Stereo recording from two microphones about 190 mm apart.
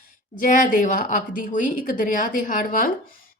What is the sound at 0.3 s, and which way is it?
Speech, 45° left (ahead or behind).